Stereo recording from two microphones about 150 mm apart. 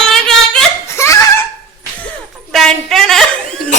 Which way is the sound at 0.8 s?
20° left (ahead or behind).